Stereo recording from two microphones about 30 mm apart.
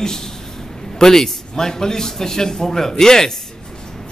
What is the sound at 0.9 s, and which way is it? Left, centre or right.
A man's voice, centre.